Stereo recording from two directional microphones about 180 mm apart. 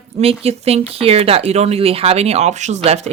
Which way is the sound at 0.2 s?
35° right (ahead or behind).